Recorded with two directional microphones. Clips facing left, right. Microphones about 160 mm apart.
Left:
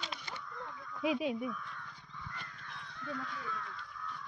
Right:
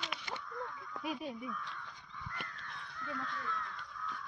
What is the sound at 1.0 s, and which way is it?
Speech, 90° left.